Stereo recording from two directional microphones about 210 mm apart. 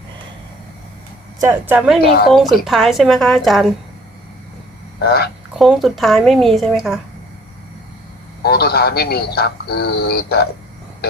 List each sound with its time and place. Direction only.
1.4 s a woman's voice: 10° right (ahead or behind)
2.0 s speech: 45° left (ahead or behind)
2.3 s a woman's voice: centre (ahead or behind)
4.9 s speech: 50° left (ahead or behind)
5.5 s a woman's voice: centre (ahead or behind)
8.4 s speech: 50° left (ahead or behind)